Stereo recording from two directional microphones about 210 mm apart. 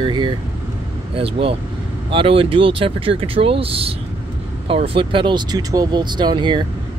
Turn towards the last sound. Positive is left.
turn(degrees=-20)  # may be behind; listen again after turning